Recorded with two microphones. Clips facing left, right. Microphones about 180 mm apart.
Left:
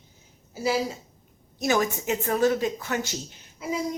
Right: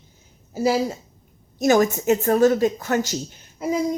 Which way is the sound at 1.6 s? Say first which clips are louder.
Right 7 dB; 45° right (ahead or behind).